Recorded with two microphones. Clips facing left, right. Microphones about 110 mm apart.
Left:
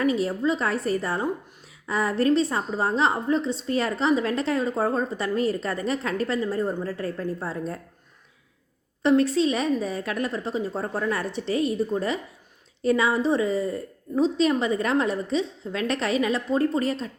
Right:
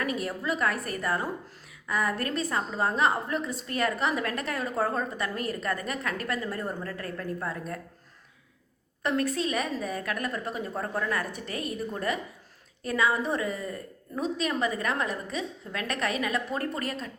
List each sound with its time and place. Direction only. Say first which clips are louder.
0.0 s a woman's voice: left 8 dB; 25° left (ahead or behind)
9.0 s a woman's voice: left 8 dB; 25° left (ahead or behind)